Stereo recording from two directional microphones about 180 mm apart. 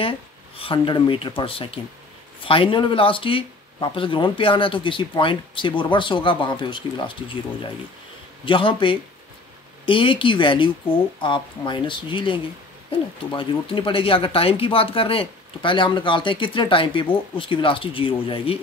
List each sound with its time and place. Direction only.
0.0 s speech: 30° left (ahead or behind)